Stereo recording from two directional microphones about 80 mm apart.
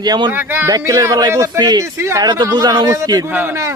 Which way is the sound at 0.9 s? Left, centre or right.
Right.